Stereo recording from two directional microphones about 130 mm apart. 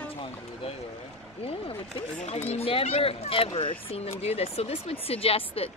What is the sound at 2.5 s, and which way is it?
Speech, 50° left (ahead or behind).